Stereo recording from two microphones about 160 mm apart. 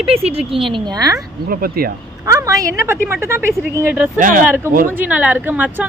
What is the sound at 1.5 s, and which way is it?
Speech, 65° right (ahead or behind).